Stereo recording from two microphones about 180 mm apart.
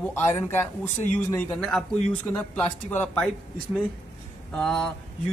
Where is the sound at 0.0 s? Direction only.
10° left (ahead or behind).